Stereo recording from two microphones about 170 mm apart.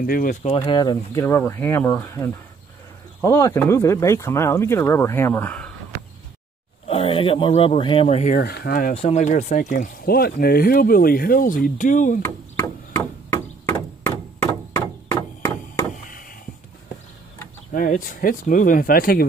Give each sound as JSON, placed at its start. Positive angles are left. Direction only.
{"t": 0.0, "sound": "speech", "side_deg": 55}
{"t": 0.6, "sound": "speech", "side_deg": 25}
{"t": 6.9, "sound": "speech", "side_deg": 35}
{"t": 8.4, "sound": "speech", "side_deg": 65}
{"t": 8.9, "sound": "speech", "side_deg": 40}
{"t": 12.2, "sound": "chop", "side_deg": 10}
{"t": 16.1, "sound": "a sound", "side_deg": 55}
{"t": 17.7, "sound": "speech", "side_deg": 55}